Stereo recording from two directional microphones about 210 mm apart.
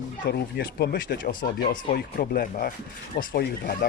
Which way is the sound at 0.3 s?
50° left (ahead or behind).